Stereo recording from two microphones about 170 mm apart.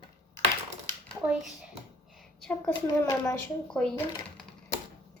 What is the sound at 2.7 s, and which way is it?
Speech, 20° left (ahead or behind).